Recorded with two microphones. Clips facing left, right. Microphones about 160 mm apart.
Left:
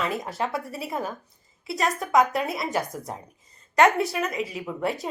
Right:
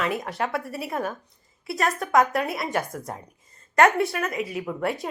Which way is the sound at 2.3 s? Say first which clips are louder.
Right 1 dB; 25° left (ahead or behind).